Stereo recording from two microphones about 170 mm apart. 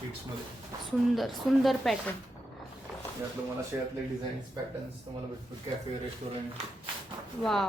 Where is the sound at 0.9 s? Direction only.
Centre (ahead or behind).